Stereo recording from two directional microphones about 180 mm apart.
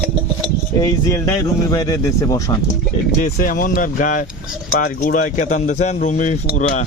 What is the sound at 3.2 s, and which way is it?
Speech, 50° left (ahead or behind).